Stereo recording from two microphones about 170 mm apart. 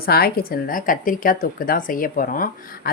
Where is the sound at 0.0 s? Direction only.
65° left (ahead or behind).